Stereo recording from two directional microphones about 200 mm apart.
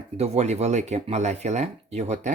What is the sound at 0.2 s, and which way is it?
Speech, 35° right (ahead or behind).